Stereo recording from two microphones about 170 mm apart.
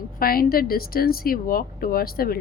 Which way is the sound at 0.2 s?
60° left (ahead or behind).